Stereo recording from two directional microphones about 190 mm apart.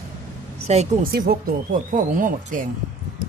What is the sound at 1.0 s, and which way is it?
Speech, 50° right (ahead or behind).